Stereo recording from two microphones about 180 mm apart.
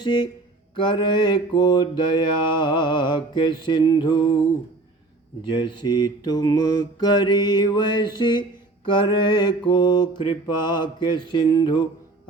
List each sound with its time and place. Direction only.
0.0 s speech: 25° left (ahead or behind)
0.8 s mantra: 25° left (ahead or behind)
5.4 s mantra: 25° left (ahead or behind)